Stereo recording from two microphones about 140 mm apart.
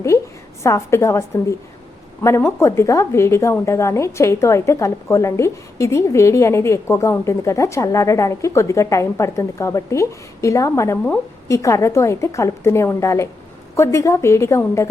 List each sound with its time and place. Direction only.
0.6 s a woman's voice: 20° left (ahead or behind)